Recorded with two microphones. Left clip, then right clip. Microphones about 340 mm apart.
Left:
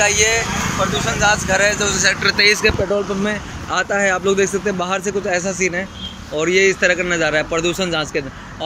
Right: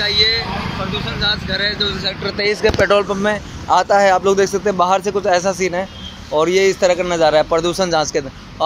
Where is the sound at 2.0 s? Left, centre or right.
Centre.